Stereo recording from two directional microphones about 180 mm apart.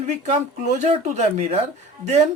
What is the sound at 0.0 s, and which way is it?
Speech, 40° right (ahead or behind).